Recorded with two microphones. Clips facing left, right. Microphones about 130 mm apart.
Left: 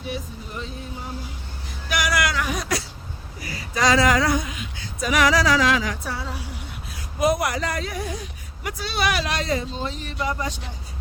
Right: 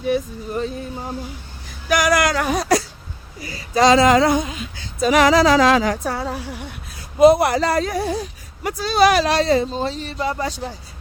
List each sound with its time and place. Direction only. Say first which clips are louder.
0.1 s speech: right 11 dB; 45° right (ahead or behind)
1.9 s a sound: right 7 dB; 45° right (ahead or behind)
3.4 s female singing: right 7 dB; 30° right (ahead or behind); by 6.4 s 50° right (ahead or behind)
7.2 s a man's voice: right 9 dB; 30° right (ahead or behind)